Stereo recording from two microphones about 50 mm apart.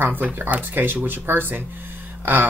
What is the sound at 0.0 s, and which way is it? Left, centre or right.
Speech, right.